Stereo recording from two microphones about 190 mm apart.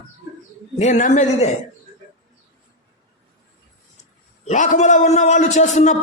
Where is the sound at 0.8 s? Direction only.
40° left (ahead or behind).